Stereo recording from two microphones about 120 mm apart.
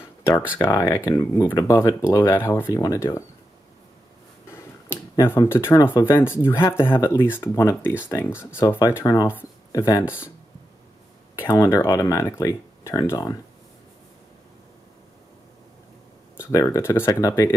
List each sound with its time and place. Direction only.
0.0 s a sound: 25° left (ahead or behind)
0.6 s speech: 25° left (ahead or behind)
5.1 s speech: 20° left (ahead or behind)
8.6 s speech: 35° left (ahead or behind)
11.5 s speech: 30° left (ahead or behind)
16.3 s speech: 25° left (ahead or behind)